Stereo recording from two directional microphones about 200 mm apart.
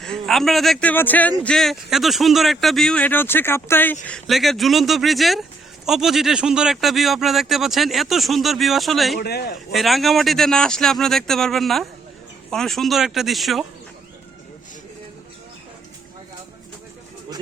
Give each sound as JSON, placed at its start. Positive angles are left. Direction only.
{"t": 0.0, "sound": "a man's voice", "side_deg": 0}
{"t": 9.1, "sound": "speech", "side_deg": 50}
{"t": 9.7, "sound": "speech", "side_deg": 0}